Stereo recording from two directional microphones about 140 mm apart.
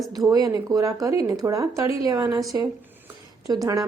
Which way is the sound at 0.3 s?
25° right (ahead or behind).